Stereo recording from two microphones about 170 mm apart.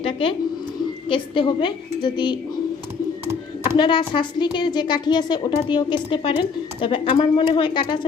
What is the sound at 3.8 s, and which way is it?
A woman's voice, 30° left (ahead or behind).